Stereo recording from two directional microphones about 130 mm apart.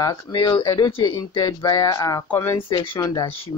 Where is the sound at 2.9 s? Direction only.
25° left (ahead or behind).